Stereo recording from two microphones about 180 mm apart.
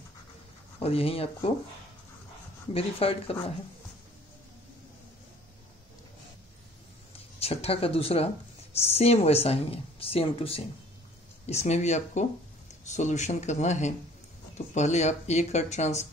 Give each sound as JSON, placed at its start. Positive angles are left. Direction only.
{"t": 0.7, "sound": "speech", "side_deg": 35}
{"t": 2.7, "sound": "speech", "side_deg": 35}
{"t": 7.3, "sound": "speech", "side_deg": 35}